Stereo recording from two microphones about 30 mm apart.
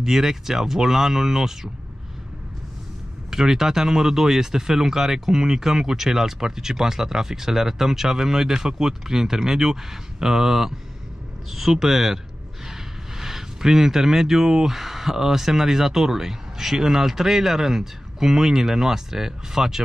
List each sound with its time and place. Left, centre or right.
0.0 s speech: centre
3.3 s speech: centre
11.8 s speech: centre
13.2 s speech: centre